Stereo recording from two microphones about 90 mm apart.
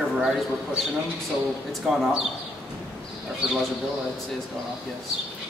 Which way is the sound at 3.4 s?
10° right (ahead or behind).